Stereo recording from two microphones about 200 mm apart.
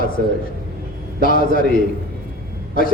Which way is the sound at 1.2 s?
45° left (ahead or behind).